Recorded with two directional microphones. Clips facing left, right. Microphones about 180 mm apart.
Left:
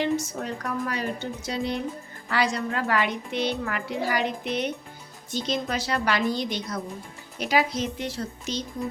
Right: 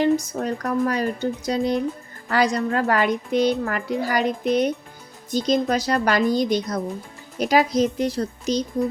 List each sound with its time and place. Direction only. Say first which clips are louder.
0.0 s a woman's voice: right 6 dB; 40° right (ahead or behind)